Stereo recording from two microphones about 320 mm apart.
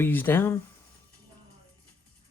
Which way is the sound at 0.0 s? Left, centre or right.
Centre.